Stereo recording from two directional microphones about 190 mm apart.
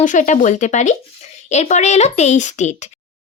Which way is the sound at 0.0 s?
40° left (ahead or behind).